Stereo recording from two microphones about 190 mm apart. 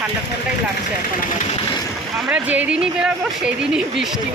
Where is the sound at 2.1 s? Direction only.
5° right (ahead or behind).